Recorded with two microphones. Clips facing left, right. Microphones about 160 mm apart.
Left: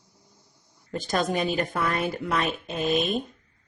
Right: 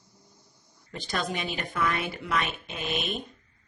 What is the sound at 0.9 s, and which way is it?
Speech, 45° left (ahead or behind).